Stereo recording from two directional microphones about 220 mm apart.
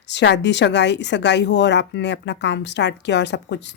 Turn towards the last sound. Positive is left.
turn(degrees=55)  # may be behind; listen again after turning